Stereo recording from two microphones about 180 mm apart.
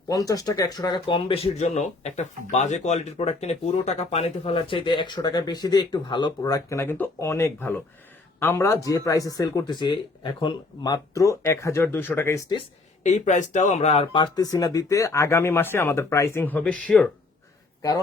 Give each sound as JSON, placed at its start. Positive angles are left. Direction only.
{"t": 0.1, "sound": "speech", "side_deg": 20}
{"t": 12.5, "sound": "speech", "side_deg": 40}